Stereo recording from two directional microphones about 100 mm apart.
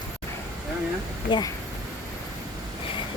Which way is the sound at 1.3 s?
45° left (ahead or behind).